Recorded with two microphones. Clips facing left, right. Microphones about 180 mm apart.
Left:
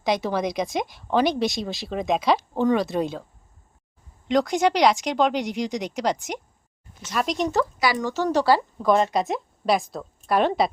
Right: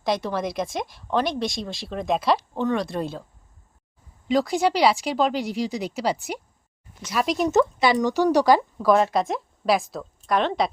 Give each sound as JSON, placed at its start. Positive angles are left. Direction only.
{"t": 0.0, "sound": "a woman's voice", "side_deg": 0}
{"t": 4.3, "sound": "a woman's voice", "side_deg": -5}
{"t": 7.5, "sound": "speech", "side_deg": -25}
{"t": 8.8, "sound": "a woman's voice", "side_deg": -5}